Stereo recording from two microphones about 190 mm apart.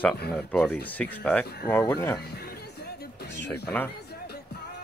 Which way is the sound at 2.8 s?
65° left (ahead or behind).